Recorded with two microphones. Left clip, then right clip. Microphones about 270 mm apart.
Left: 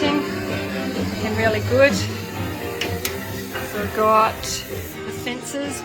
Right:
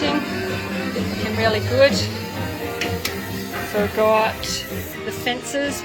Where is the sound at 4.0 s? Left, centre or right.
Centre.